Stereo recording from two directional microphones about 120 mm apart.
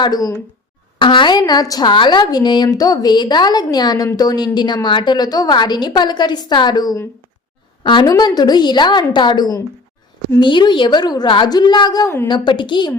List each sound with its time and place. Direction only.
0.0 s speech: 30° left (ahead or behind)
0.9 s speech: 40° left (ahead or behind)